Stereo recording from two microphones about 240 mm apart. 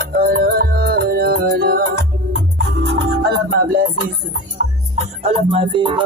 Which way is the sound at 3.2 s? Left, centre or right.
Right.